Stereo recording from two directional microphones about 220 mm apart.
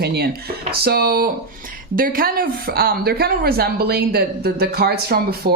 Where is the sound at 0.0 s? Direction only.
45° right (ahead or behind).